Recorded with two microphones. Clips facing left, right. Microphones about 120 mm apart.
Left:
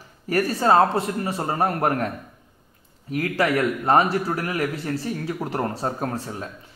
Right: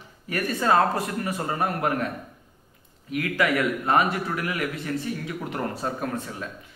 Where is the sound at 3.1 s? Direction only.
35° left (ahead or behind).